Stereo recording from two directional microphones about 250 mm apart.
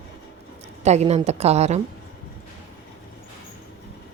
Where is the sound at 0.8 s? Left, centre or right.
Right.